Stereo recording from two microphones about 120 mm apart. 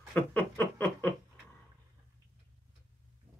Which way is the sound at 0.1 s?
15° left (ahead or behind).